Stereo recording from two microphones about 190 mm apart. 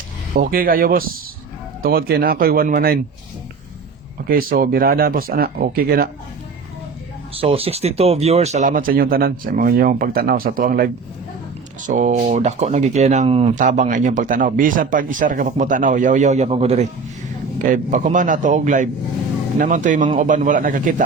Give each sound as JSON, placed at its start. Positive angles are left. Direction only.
{"t": 0.3, "sound": "speech", "side_deg": -50}
{"t": 4.3, "sound": "speech", "side_deg": -50}
{"t": 7.3, "sound": "speech", "side_deg": -30}